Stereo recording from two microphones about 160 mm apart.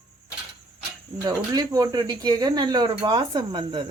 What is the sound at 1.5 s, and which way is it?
Speech, 25° right (ahead or behind).